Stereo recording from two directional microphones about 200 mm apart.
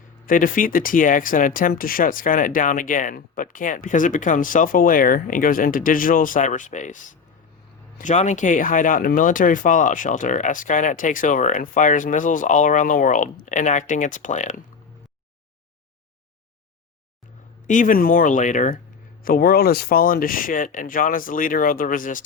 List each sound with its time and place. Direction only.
0.3 s speech: 45° left (ahead or behind)
17.7 s speech: 40° left (ahead or behind)